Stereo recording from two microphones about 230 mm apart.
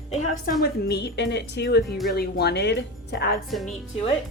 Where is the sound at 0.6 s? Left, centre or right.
Left.